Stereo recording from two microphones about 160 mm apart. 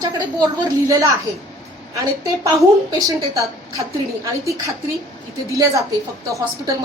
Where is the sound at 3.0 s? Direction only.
20° right (ahead or behind).